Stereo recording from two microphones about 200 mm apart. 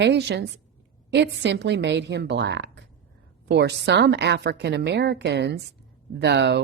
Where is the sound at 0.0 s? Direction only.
60° right (ahead or behind).